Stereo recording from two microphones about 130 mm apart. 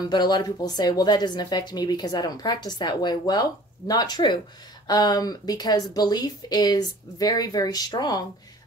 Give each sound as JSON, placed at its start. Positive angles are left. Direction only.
{"t": 0.1, "sound": "speech", "side_deg": 35}